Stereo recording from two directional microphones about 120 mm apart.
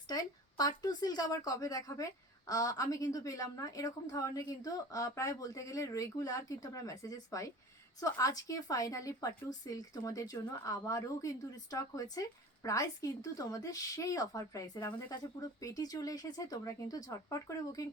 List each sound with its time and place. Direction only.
0.1 s speech: 30° left (ahead or behind)